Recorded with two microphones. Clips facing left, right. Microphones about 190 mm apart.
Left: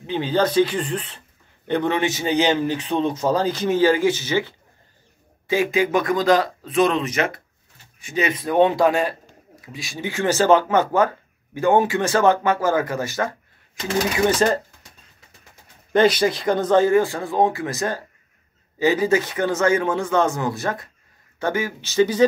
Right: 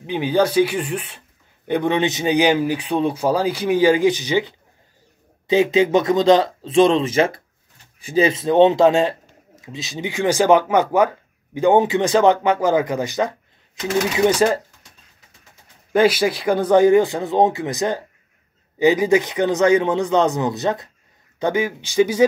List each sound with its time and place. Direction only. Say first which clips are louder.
0.0 s speech: right 2 dB; 15° right (ahead or behind)
15.9 s speech: right 1 dB; 5° right (ahead or behind)